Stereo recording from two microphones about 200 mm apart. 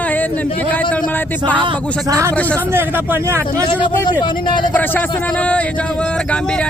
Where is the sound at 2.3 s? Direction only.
5° left (ahead or behind).